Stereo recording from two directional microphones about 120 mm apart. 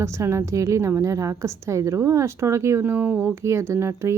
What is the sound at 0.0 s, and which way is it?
A woman's voice, 25° right (ahead or behind).